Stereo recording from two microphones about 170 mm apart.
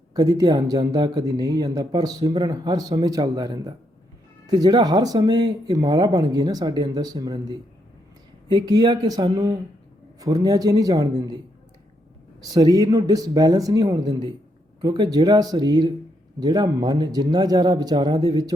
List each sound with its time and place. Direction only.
0.1 s speech: 20° right (ahead or behind)
12.4 s speech: 20° right (ahead or behind)